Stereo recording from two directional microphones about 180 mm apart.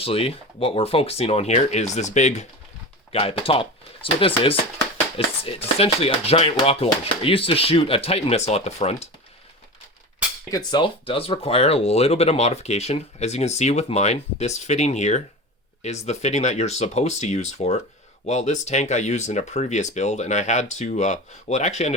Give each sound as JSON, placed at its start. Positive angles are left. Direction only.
{"t": 0.0, "sound": "speech", "side_deg": 30}
{"t": 10.7, "sound": "speech", "side_deg": 25}